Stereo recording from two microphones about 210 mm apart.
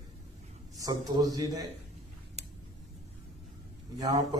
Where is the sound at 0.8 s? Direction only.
15° right (ahead or behind).